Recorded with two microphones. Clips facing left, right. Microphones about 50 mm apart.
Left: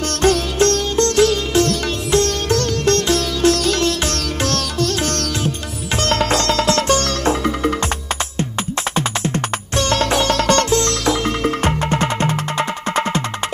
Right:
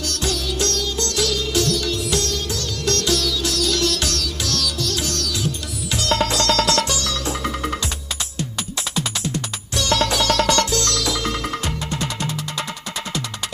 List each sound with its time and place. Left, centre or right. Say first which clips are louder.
0.1 s sitar: left 10 dB; left
2.9 s music: even; left
9.0 s music: left 4 dB; left